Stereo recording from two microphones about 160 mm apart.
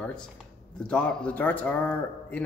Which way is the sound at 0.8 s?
5° left (ahead or behind).